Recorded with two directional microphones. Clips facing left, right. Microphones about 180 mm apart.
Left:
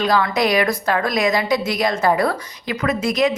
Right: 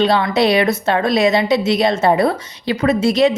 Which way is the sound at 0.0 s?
25° right (ahead or behind).